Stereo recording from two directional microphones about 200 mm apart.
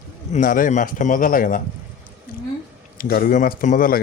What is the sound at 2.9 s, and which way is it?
A man's voice, 45° left (ahead or behind).